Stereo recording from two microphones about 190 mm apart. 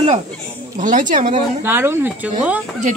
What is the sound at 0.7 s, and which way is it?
Speech, 45° right (ahead or behind).